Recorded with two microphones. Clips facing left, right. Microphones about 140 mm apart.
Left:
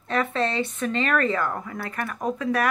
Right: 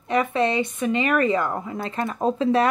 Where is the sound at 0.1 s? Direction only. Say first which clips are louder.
Right 3 dB; 15° right (ahead or behind).